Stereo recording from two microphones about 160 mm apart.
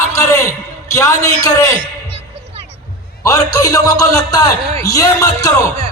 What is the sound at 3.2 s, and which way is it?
A man's voice, 20° left (ahead or behind).